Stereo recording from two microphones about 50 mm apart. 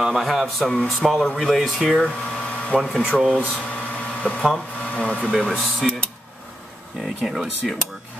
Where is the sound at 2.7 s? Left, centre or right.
Left.